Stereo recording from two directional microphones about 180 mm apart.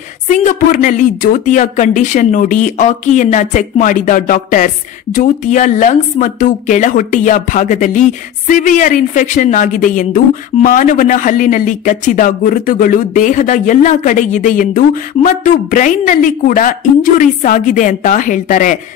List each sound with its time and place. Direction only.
0.3 s speech: 45° left (ahead or behind)